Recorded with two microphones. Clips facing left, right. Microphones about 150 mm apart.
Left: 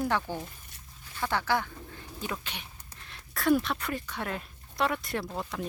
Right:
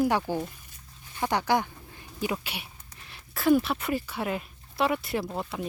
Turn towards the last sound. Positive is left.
turn(degrees=-5)  # may be behind; listen again after turning